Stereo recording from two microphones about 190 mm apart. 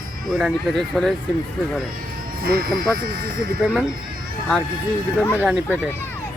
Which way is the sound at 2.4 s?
50° right (ahead or behind).